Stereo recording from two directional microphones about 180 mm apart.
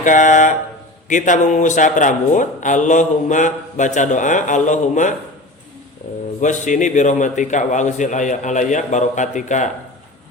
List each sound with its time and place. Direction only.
0.0 s a man's voice: 45° left (ahead or behind)
6.4 s a man's voice: 45° left (ahead or behind)